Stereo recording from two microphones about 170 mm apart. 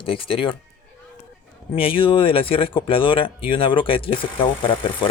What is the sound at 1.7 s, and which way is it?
Speech, 30° left (ahead or behind).